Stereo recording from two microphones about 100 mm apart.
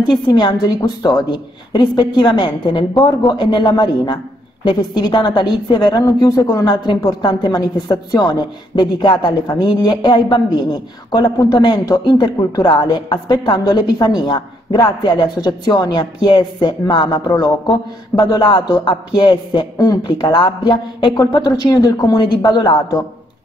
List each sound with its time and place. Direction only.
0.0 s a woman's voice: 45° left (ahead or behind)